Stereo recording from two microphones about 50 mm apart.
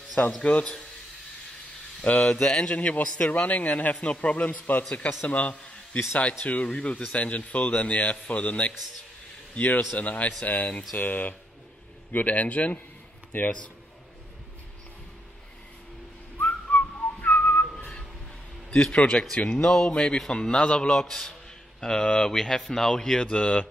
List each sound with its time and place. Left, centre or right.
0.4 s a man's voice: left
2.0 s speech: centre
2.7 s a man's voice: left
16.3 s whistling: left
18.7 s a man's voice: left